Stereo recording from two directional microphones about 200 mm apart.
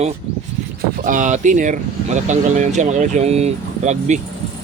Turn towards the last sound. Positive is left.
turn(degrees=-35)  # may be behind; listen again after turning